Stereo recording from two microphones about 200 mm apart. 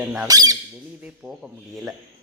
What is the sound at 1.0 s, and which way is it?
Speech, 5° right (ahead or behind).